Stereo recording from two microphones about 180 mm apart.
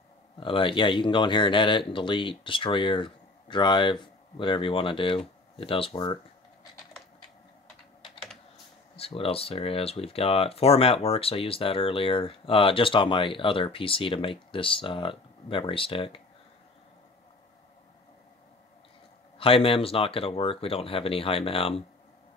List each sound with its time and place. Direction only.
0.4 s speech: 30° left (ahead or behind)
8.9 s speech: 30° left (ahead or behind)
19.3 s speech: 30° left (ahead or behind)